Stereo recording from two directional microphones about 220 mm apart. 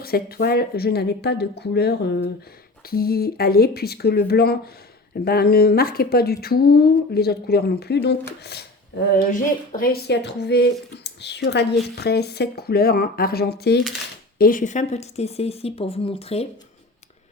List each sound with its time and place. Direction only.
0.0 s speech: 45° left (ahead or behind); by 16.5 s 25° left (ahead or behind)